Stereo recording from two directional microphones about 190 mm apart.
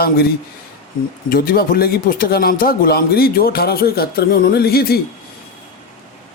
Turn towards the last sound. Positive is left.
turn(degrees=55)  # may be behind; listen again after turning